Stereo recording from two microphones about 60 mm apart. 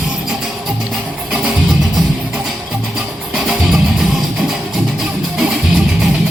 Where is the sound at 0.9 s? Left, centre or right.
Centre.